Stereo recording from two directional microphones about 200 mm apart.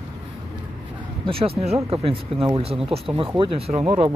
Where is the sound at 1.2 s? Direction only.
25° right (ahead or behind).